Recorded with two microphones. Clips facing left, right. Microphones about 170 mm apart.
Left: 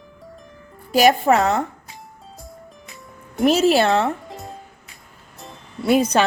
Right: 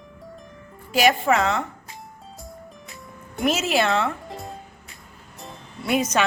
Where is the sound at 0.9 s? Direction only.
40° left (ahead or behind).